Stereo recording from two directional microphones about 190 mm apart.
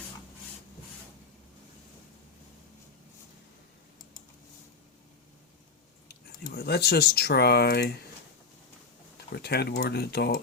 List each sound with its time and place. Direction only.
6.6 s speech: 60° left (ahead or behind)
9.1 s speech: 55° left (ahead or behind)